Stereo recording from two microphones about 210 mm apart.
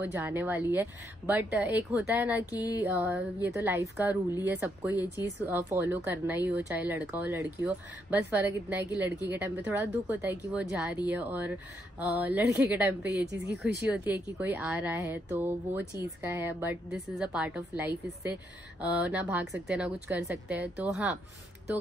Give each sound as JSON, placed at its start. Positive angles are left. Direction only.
{"t": 0.0, "sound": "speech", "side_deg": -10}
{"t": 2.5, "sound": "music", "side_deg": 15}
{"t": 2.8, "sound": "speech", "side_deg": -10}